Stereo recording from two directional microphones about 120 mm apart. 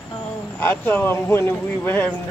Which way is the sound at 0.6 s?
15° left (ahead or behind).